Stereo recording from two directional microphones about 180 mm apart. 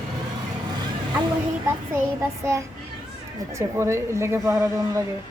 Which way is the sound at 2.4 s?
15° right (ahead or behind).